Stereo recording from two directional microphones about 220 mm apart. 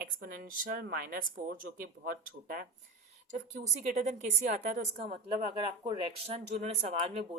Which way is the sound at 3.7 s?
35° right (ahead or behind).